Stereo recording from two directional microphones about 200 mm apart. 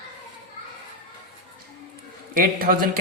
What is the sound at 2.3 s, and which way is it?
Speech, 45° right (ahead or behind).